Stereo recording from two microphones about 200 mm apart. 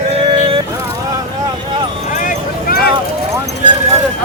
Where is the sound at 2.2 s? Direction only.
45° left (ahead or behind).